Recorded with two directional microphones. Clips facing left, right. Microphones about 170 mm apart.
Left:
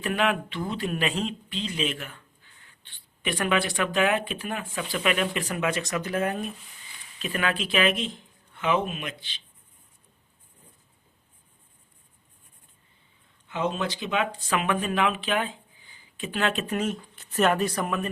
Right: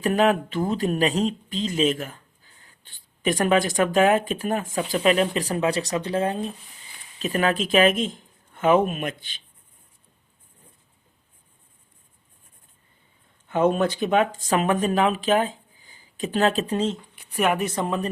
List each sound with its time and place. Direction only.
0.0 s speech: 40° right (ahead or behind)
7.2 s speech: 40° right (ahead or behind)
13.5 s speech: 50° right (ahead or behind); by 17.0 s 30° right (ahead or behind)
17.2 s speech: 10° right (ahead or behind); by 18.1 s 30° right (ahead or behind)